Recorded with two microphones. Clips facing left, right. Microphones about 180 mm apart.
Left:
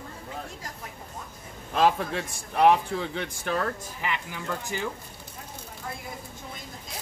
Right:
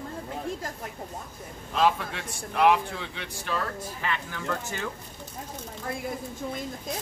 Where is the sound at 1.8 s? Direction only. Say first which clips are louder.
Left 2 dB; 40° left (ahead or behind).